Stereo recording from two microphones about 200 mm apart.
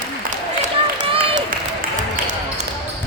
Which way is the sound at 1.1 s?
25° right (ahead or behind).